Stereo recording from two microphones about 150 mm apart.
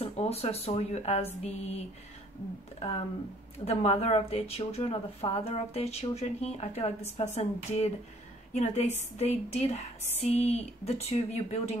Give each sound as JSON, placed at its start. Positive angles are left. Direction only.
{"t": 0.0, "sound": "speech", "side_deg": 45}
{"t": 3.5, "sound": "speech", "side_deg": 45}